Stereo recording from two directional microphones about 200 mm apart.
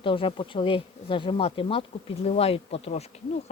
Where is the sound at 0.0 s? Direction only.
25° left (ahead or behind).